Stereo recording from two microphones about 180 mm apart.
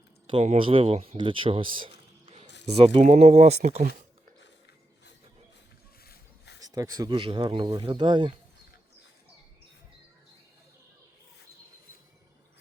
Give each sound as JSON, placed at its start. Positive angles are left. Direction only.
{"t": 0.4, "sound": "speech", "side_deg": -30}
{"t": 6.1, "sound": "a sound", "side_deg": 70}
{"t": 6.6, "sound": "speech", "side_deg": -20}